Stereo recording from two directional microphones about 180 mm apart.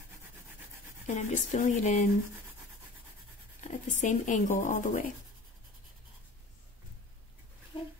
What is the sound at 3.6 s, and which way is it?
Speech, 40° left (ahead or behind).